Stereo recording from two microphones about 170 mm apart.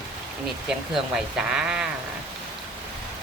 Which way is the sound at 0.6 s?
5° right (ahead or behind).